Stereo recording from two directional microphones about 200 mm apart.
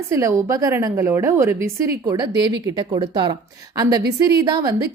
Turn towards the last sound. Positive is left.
turn(degrees=-20)  # may be behind; listen again after turning